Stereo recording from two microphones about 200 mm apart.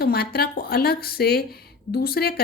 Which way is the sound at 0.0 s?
50° left (ahead or behind).